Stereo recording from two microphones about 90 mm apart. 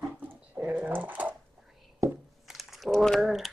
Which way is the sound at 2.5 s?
Centre (ahead or behind).